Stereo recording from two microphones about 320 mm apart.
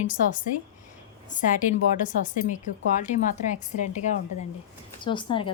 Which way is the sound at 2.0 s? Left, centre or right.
Left.